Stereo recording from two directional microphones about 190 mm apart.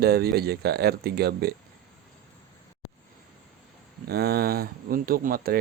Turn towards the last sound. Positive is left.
turn(degrees=-50)  # may be behind; listen again after turning